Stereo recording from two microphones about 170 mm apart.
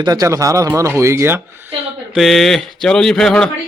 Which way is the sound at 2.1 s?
Centre (ahead or behind).